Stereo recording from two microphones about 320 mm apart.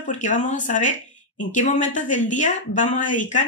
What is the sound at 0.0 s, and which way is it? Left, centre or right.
Speech, left.